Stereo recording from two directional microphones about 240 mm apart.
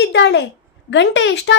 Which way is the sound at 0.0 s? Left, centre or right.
Left.